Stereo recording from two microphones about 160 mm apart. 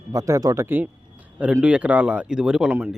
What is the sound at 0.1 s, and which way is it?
Speech, 20° right (ahead or behind).